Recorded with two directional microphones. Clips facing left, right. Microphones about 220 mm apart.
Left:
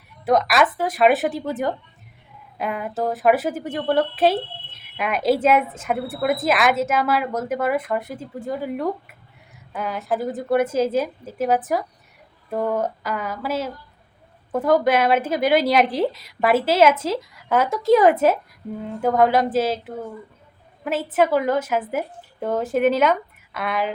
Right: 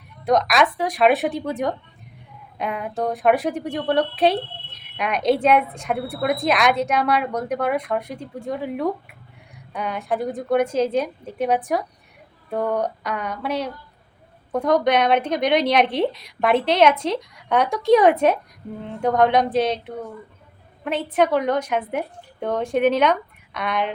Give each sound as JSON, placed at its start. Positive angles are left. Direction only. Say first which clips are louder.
{"t": 0.3, "sound": "a woman's voice", "louder": "even", "side_deg": 5}